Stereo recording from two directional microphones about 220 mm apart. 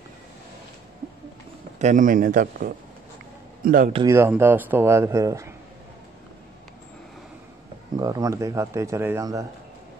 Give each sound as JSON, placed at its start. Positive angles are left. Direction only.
{"t": 1.8, "sound": "a man's voice", "side_deg": -35}
{"t": 3.9, "sound": "speech", "side_deg": -15}
{"t": 7.9, "sound": "speech", "side_deg": -15}